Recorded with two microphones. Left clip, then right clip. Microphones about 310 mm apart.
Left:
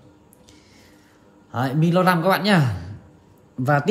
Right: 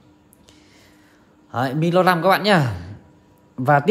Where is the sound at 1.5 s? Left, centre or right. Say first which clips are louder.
Right 3 dB; right.